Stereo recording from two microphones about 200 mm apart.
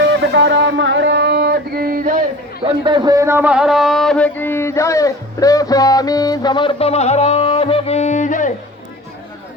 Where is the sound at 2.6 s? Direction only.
25° right (ahead or behind); by 8.5 s 40° left (ahead or behind).